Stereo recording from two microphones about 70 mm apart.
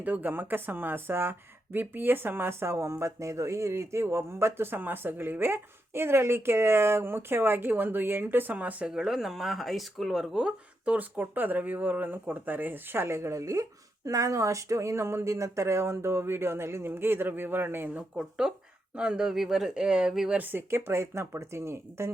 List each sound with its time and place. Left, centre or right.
0.0 s speech: right
8.9 s speech: centre
10.9 s speech: right
18.2 s speech: centre
20.3 s speech: right